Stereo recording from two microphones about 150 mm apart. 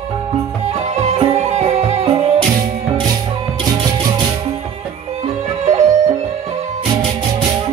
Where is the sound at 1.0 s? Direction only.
45° right (ahead or behind).